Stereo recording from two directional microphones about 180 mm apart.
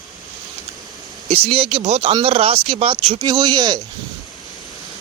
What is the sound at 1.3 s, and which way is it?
Speech, 30° right (ahead or behind).